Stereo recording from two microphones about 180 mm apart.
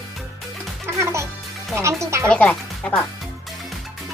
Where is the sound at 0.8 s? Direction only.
15° right (ahead or behind).